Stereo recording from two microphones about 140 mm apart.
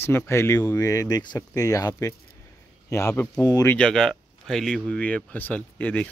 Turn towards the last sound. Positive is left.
turn(degrees=10)  # may be behind; listen again after turning